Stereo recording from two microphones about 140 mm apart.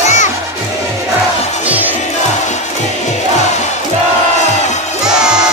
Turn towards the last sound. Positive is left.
turn(degrees=-5)  # may be behind; listen again after turning